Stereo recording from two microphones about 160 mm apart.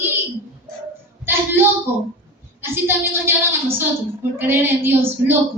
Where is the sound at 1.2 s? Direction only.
15° right (ahead or behind).